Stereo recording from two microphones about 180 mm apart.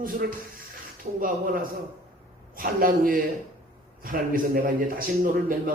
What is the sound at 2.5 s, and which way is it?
Speech, 50° right (ahead or behind).